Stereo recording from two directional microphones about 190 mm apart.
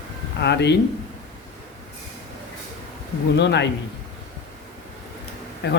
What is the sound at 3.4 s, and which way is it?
Speech, 65° left (ahead or behind).